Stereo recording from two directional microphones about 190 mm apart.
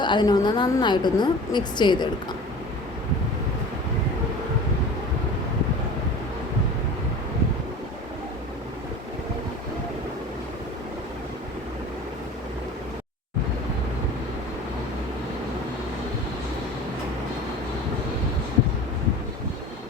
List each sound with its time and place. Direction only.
0.0 s a woman's voice: 25° left (ahead or behind)